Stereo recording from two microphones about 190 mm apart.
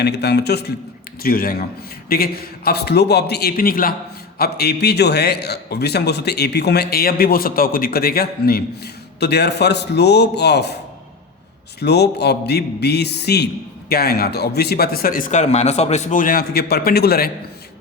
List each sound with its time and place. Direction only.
0.0 s a man's voice: 60° left (ahead or behind)
11.8 s a man's voice: 60° left (ahead or behind)